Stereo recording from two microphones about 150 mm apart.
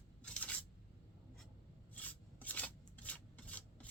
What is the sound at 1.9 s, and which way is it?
Filing, 10° left (ahead or behind).